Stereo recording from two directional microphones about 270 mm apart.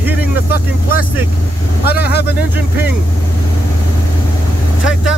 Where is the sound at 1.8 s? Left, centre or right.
Left.